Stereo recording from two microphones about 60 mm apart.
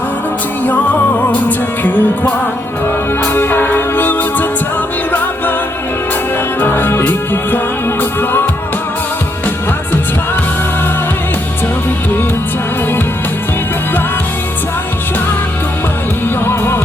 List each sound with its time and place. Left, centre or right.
0.6 s music: left
6.6 s music: left
16.5 s music: left